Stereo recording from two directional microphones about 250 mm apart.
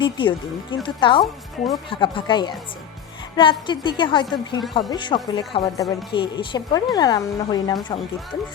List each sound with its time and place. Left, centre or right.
0.0 s a woman's voice: centre
1.2 s a woman's voice: centre
1.9 s a woman's voice: centre